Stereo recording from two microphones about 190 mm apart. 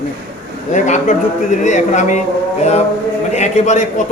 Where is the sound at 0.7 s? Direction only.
40° left (ahead or behind).